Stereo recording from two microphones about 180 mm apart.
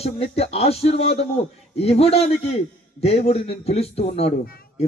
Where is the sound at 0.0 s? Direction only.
35° left (ahead or behind).